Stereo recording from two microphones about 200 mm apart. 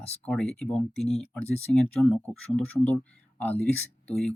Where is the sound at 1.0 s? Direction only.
30° left (ahead or behind).